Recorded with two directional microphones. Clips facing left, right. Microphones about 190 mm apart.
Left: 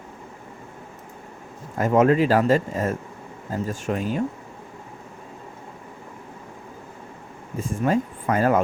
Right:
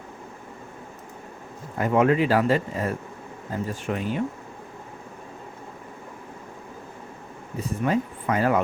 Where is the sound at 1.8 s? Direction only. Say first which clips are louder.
Left 2 dB; 40° left (ahead or behind).